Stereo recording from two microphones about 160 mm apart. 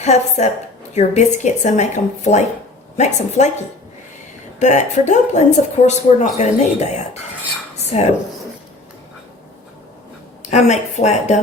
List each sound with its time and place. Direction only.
0.0 s speech: 45° left (ahead or behind)
4.6 s speech: 50° left (ahead or behind)
10.5 s speech: 45° left (ahead or behind)